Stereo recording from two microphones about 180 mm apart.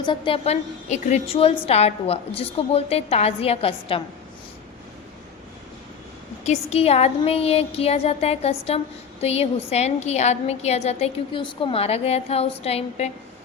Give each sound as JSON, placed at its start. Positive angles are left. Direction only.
{"t": 0.0, "sound": "a woman's voice", "side_deg": 30}
{"t": 6.4, "sound": "a woman's voice", "side_deg": 35}